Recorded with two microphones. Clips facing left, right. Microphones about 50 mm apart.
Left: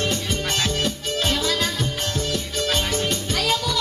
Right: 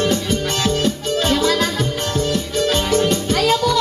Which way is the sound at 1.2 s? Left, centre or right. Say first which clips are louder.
Right 6 dB; centre.